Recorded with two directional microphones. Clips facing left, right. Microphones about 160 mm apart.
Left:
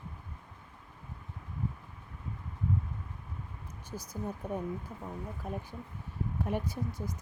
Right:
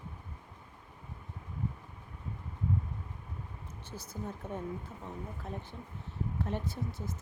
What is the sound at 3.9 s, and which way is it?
Speech, 10° left (ahead or behind).